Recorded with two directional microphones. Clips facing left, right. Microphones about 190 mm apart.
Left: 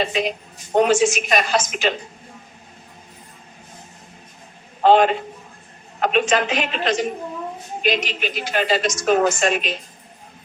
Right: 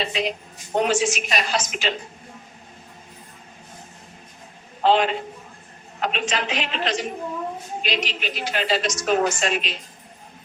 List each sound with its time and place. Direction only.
0.0 s a woman's voice: 50° left (ahead or behind)
4.8 s a woman's voice: 50° left (ahead or behind)